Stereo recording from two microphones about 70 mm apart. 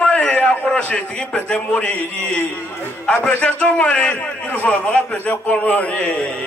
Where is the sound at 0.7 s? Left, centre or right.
Centre.